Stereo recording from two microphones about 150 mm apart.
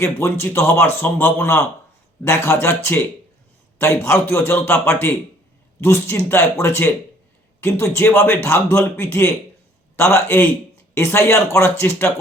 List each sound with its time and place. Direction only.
0.0 s speech: 15° left (ahead or behind)